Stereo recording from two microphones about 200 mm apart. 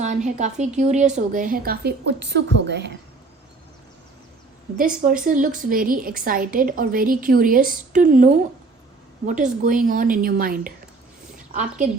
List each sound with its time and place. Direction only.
0.0 s a woman's voice: 35° right (ahead or behind); by 2.9 s 60° right (ahead or behind)
4.8 s a woman's voice: 45° right (ahead or behind)